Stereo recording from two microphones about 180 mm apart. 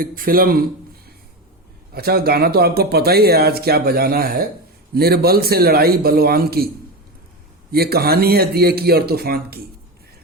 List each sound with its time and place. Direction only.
0.0 s speech: 50° right (ahead or behind)
1.9 s speech: 60° right (ahead or behind)
7.7 s speech: 60° right (ahead or behind)